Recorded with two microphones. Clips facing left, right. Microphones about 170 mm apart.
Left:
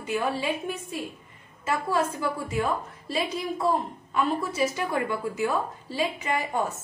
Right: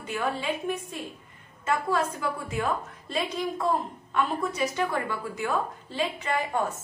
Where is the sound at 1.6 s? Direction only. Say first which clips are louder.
Even; 5° left (ahead or behind).